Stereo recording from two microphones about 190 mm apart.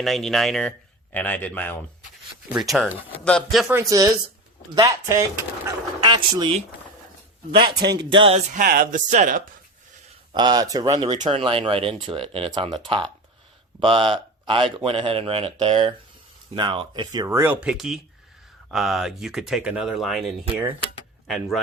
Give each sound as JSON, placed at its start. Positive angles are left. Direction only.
{"t": 0.0, "sound": "a man's voice", "side_deg": 0}
{"t": 3.8, "sound": "speech", "side_deg": -15}
{"t": 5.6, "sound": "a sound", "side_deg": -20}
{"t": 7.9, "sound": "speech", "side_deg": -25}
{"t": 8.5, "sound": "speech", "side_deg": -50}
{"t": 10.3, "sound": "speech", "side_deg": -20}
{"t": 21.2, "sound": "speech", "side_deg": 0}